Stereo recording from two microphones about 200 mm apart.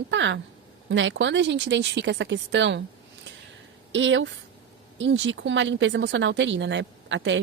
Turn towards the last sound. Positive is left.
turn(degrees=-65)  # may be behind; listen again after turning